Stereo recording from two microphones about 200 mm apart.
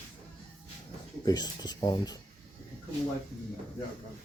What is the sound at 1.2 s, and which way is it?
Speech, 20° left (ahead or behind).